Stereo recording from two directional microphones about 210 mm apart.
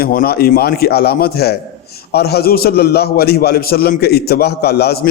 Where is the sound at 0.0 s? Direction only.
45° left (ahead or behind).